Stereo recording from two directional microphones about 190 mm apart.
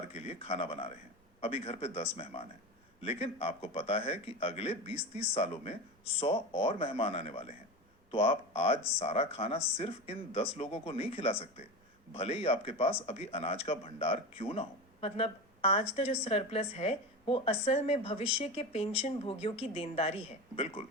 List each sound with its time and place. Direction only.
0.1 s speech: 30° left (ahead or behind)